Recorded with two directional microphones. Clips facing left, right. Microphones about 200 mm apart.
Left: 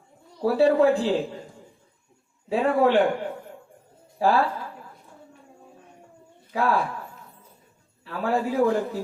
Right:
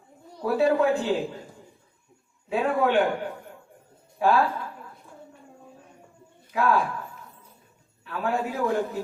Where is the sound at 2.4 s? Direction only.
35° left (ahead or behind).